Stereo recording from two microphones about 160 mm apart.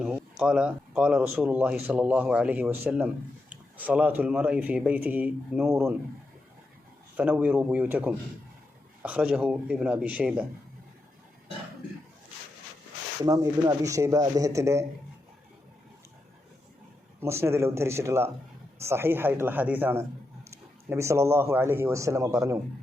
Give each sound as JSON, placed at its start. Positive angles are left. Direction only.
{"t": 0.0, "sound": "speech", "side_deg": -5}
{"t": 7.2, "sound": "speech", "side_deg": -10}
{"t": 13.2, "sound": "a man's voice", "side_deg": -20}
{"t": 17.2, "sound": "speech", "side_deg": -15}